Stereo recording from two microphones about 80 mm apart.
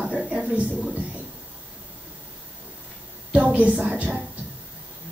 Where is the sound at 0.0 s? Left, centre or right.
Centre.